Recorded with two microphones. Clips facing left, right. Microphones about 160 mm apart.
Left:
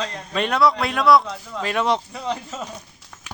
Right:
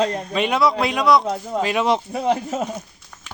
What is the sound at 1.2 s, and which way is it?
Speech, 45° right (ahead or behind).